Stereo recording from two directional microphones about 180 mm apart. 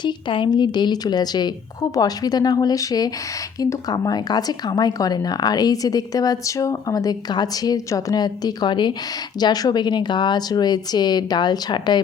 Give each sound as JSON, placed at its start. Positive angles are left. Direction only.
{"t": 0.0, "sound": "speech", "side_deg": 25}